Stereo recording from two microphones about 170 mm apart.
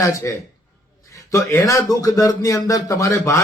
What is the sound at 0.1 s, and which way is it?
Speech, 20° left (ahead or behind).